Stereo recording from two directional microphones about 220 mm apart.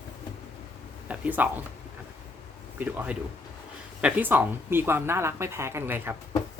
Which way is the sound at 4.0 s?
5° right (ahead or behind).